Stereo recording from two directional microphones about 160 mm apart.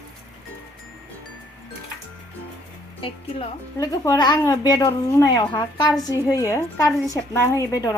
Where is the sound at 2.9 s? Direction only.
35° left (ahead or behind).